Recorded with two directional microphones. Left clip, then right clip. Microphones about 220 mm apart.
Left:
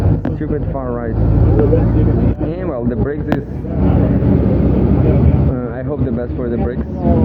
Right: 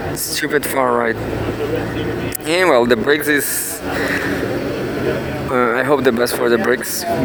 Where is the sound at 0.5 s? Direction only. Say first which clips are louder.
Right 6 dB; 65° right (ahead or behind).